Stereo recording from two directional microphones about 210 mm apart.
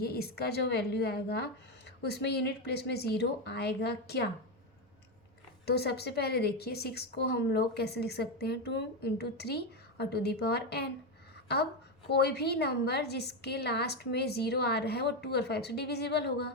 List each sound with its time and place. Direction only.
0.0 s a woman's voice: 50° left (ahead or behind)
5.6 s a woman's voice: 50° left (ahead or behind)